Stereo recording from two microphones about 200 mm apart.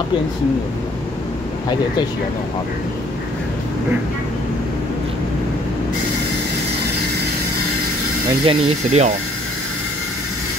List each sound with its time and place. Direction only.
8.5 s speech: 35° right (ahead or behind)